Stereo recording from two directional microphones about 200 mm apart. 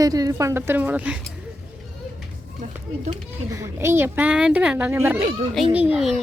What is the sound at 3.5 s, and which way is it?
A woman's voice, 15° right (ahead or behind).